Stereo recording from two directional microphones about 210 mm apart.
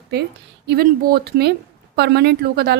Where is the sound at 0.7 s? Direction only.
45° right (ahead or behind).